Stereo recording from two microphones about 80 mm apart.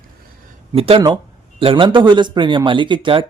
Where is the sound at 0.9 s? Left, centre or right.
Right.